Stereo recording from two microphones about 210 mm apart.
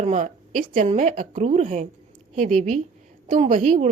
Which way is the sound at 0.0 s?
35° right (ahead or behind).